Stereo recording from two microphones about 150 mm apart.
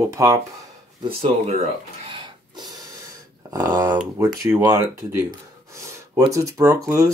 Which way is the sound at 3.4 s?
25° right (ahead or behind).